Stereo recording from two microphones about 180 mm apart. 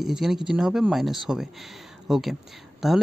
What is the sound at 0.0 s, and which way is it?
Speech, centre (ahead or behind).